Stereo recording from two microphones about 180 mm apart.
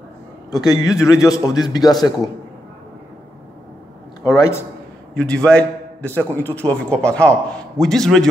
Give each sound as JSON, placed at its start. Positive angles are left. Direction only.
{"t": 0.5, "sound": "a man's voice", "side_deg": 20}
{"t": 4.2, "sound": "a man's voice", "side_deg": 20}
{"t": 5.1, "sound": "a man's voice", "side_deg": 5}